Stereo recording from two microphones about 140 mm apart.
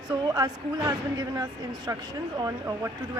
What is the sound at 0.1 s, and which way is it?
A woman's voice, 25° right (ahead or behind).